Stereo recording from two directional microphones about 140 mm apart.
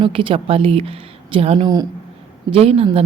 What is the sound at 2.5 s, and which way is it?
Speech, 45° right (ahead or behind).